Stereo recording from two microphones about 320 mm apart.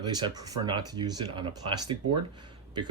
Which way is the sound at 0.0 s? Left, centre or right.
Centre.